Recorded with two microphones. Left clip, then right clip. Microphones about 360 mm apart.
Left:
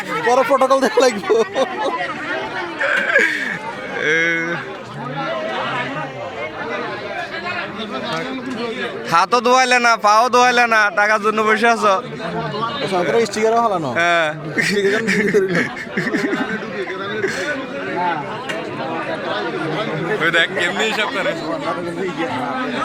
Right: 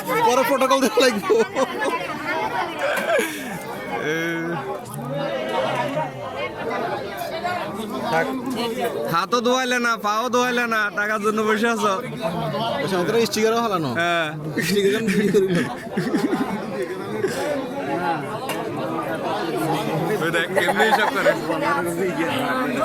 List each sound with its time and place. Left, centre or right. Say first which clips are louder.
0.3 s speech: left 5 dB; centre
2.8 s snicker: left 7 dB; centre
4.0 s a man's voice: left 9 dB; centre
9.1 s a man's voice: left 8 dB; centre
13.1 s speech: left 4 dB; centre
13.9 s a man's voice: left 6 dB; centre
14.7 s speech: left 1 dB; centre
14.9 s a man's voice: left 4 dB; centre
20.2 s a man's voice: left 5 dB; centre